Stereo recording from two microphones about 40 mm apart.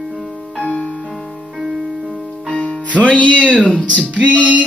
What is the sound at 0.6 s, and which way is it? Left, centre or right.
Music, left.